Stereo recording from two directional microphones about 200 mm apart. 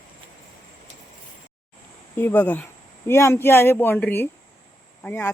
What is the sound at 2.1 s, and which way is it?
Speech, 10° left (ahead or behind).